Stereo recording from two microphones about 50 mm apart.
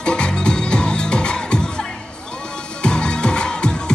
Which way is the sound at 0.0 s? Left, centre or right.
Centre.